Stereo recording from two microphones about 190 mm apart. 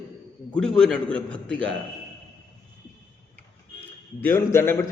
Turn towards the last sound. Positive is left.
turn(degrees=15)  # may be behind; listen again after turning